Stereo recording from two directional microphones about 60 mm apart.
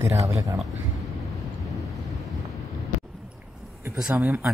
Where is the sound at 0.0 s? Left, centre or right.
Right.